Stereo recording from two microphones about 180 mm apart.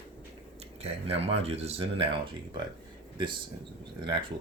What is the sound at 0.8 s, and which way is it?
Speech, 35° right (ahead or behind).